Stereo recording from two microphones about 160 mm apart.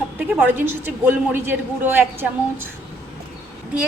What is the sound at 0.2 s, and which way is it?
A man's voice, 10° right (ahead or behind).